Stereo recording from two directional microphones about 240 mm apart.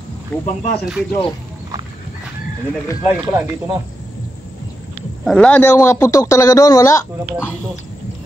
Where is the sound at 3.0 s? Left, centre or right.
Centre.